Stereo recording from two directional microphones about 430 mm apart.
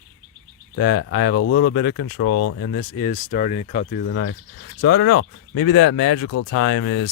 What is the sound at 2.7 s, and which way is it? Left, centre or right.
Speech, left.